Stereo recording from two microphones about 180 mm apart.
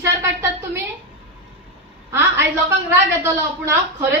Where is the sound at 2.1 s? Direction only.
15° right (ahead or behind).